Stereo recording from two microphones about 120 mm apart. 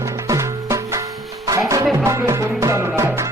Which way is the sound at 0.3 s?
25° right (ahead or behind).